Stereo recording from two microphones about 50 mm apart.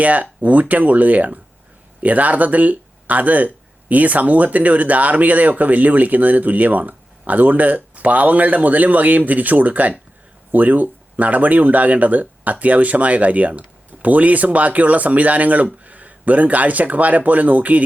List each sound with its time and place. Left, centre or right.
0.0 s speech: right